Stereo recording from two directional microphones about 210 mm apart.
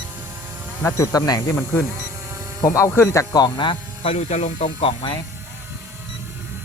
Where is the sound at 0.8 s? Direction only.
10° left (ahead or behind).